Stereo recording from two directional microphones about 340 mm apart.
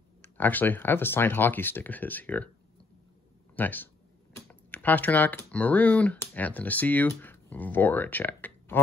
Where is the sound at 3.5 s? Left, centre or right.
Centre.